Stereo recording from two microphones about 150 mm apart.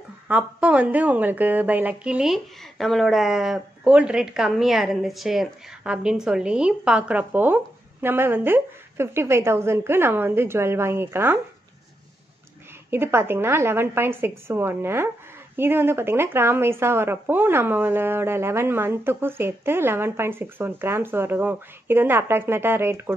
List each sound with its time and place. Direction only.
0.3 s a woman's voice: 10° right (ahead or behind)
12.9 s a woman's voice: 15° right (ahead or behind)